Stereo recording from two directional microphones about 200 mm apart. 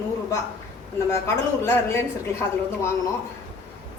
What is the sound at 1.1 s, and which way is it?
Speech, 15° left (ahead or behind).